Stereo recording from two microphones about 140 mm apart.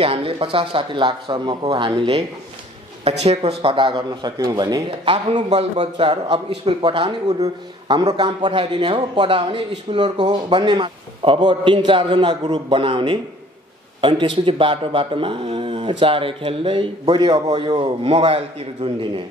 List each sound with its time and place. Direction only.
0.0 s a man's voice: 40° right (ahead or behind)
3.0 s a man's voice: 50° right (ahead or behind)
4.4 s speech: 25° right (ahead or behind)
5.3 s a man's voice: 50° right (ahead or behind)